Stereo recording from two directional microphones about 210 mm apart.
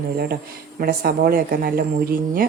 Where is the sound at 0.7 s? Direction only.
45° right (ahead or behind).